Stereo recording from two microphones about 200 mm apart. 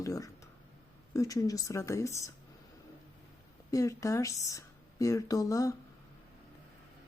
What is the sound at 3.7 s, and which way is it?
Speech, 15° left (ahead or behind).